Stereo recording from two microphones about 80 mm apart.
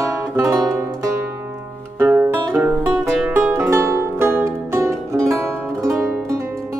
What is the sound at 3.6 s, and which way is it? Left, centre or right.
Music, right.